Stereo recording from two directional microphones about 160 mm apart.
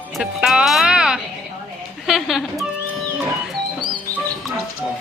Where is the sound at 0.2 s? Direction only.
5° right (ahead or behind).